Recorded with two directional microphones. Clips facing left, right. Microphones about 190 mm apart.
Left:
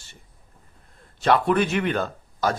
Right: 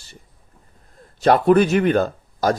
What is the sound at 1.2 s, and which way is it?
Speech, 40° right (ahead or behind).